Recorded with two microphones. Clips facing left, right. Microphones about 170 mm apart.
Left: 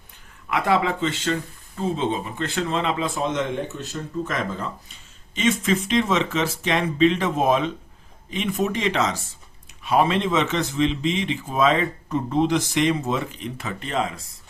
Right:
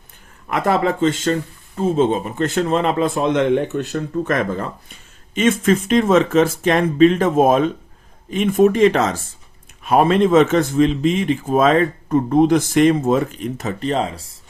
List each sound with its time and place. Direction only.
0.4 s speech: 45° right (ahead or behind)